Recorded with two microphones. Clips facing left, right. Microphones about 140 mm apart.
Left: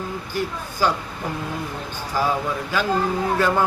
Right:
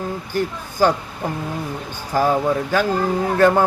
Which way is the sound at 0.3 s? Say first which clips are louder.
Right 5 dB; 50° right (ahead or behind).